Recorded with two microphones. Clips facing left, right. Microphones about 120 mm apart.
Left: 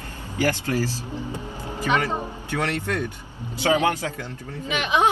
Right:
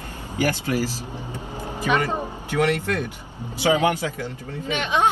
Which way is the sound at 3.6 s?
15° right (ahead or behind).